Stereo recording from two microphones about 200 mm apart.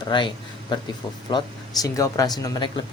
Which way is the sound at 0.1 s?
25° left (ahead or behind).